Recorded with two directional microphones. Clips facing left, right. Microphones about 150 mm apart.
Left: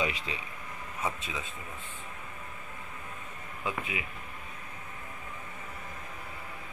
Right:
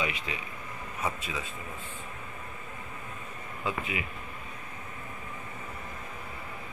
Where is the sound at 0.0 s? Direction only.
35° left (ahead or behind).